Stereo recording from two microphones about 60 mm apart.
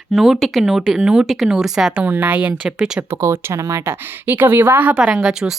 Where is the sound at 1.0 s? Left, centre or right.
Centre.